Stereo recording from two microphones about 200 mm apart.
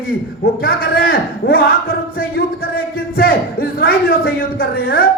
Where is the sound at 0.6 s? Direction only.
50° left (ahead or behind).